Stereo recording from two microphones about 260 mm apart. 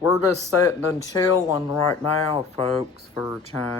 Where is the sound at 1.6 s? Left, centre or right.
Left.